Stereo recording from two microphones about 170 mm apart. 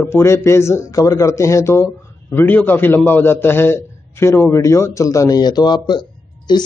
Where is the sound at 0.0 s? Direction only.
15° left (ahead or behind).